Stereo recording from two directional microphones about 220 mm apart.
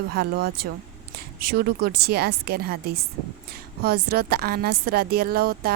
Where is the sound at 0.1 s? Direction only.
45° right (ahead or behind).